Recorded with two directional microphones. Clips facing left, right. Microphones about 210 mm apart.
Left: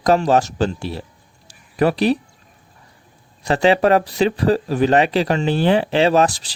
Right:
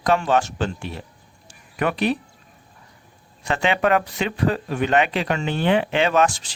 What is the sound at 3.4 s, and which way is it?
Speech, 35° left (ahead or behind).